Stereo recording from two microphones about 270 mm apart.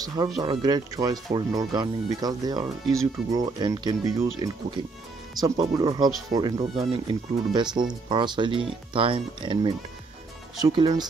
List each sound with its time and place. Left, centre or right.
0.0 s speech: centre